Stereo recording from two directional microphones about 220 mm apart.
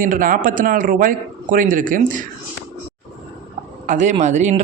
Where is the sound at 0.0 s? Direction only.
40° right (ahead or behind).